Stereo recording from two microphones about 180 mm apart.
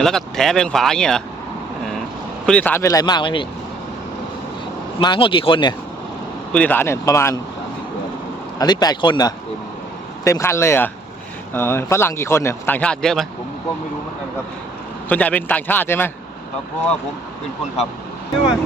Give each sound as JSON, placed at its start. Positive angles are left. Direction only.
{"t": 0.0, "sound": "speech", "side_deg": 0}
{"t": 2.5, "sound": "speech", "side_deg": 10}
{"t": 2.8, "sound": "speech", "side_deg": 20}
{"t": 4.9, "sound": "speech", "side_deg": 30}
{"t": 6.5, "sound": "speech", "side_deg": 10}
{"t": 8.5, "sound": "speech", "side_deg": 20}
{"t": 15.1, "sound": "speech", "side_deg": 10}